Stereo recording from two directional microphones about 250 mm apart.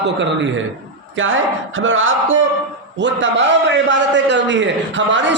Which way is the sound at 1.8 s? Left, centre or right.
Right.